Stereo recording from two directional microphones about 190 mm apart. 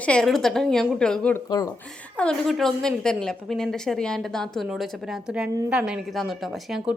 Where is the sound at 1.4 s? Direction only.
20° left (ahead or behind).